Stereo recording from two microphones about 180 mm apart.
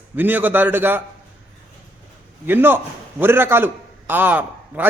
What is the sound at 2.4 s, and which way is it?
Speech, 10° right (ahead or behind).